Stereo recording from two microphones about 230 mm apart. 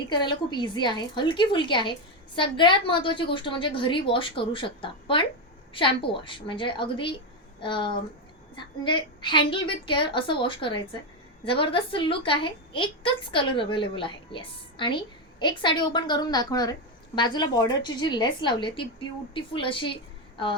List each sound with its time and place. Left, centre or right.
0.1 s a woman's voice: centre